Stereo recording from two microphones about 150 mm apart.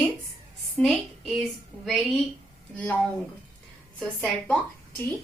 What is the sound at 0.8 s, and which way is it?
A woman's voice, 5° left (ahead or behind).